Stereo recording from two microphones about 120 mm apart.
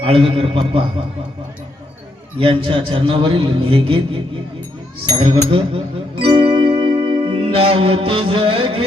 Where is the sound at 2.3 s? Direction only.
50° right (ahead or behind).